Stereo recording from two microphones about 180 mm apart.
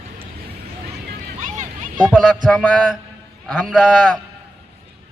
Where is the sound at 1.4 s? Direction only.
45° right (ahead or behind).